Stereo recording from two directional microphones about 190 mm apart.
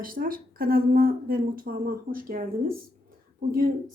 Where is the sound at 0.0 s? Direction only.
50° right (ahead or behind).